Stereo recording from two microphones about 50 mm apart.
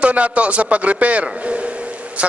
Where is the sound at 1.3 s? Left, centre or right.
Right.